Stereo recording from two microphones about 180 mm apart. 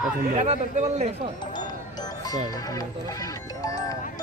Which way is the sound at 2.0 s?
20° left (ahead or behind).